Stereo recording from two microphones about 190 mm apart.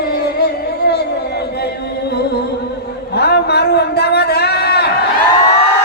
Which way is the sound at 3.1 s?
60° left (ahead or behind).